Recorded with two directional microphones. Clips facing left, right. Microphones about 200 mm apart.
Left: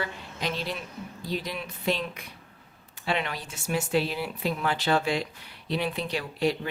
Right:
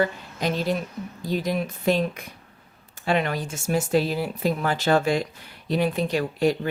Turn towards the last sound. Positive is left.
turn(degrees=-45)  # may be behind; listen again after turning